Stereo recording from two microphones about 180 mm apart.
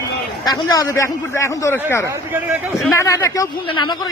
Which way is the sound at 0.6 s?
20° left (ahead or behind).